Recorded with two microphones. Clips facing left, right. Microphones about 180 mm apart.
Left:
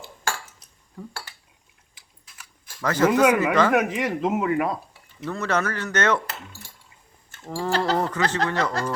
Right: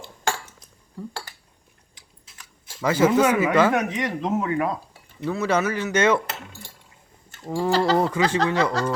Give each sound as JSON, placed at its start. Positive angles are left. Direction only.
{"t": 2.3, "sound": "a sound", "side_deg": -25}
{"t": 2.8, "sound": "speech", "side_deg": -10}
{"t": 3.7, "sound": "speech", "side_deg": 5}
{"t": 5.2, "sound": "speech", "side_deg": -5}
{"t": 7.4, "sound": "speech", "side_deg": -10}